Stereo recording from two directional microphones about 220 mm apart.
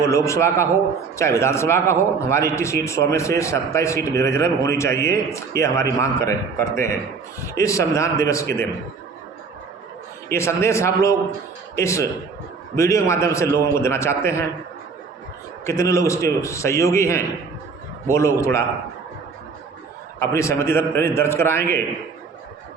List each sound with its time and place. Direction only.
0.0 s a man's voice: 15° left (ahead or behind)
10.3 s a man's voice: 10° left (ahead or behind)
15.6 s a man's voice: 15° left (ahead or behind)
20.1 s a man's voice: 10° left (ahead or behind)